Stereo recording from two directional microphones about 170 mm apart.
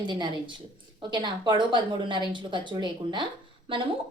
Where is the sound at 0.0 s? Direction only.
30° right (ahead or behind).